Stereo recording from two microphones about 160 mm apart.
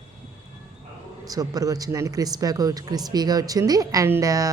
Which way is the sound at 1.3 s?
20° right (ahead or behind).